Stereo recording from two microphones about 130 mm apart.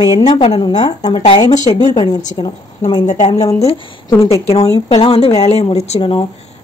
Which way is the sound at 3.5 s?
50° left (ahead or behind).